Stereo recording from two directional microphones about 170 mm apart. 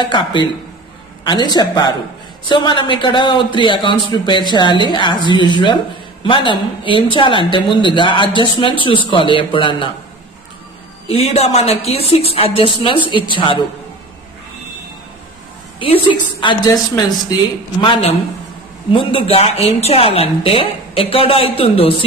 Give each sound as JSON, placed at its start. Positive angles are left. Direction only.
{"t": 0.0, "sound": "speech", "side_deg": 30}
{"t": 11.1, "sound": "a woman's voice", "side_deg": 35}
{"t": 15.8, "sound": "a woman's voice", "side_deg": 30}